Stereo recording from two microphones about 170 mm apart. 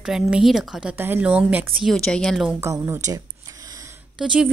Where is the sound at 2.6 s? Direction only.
20° right (ahead or behind).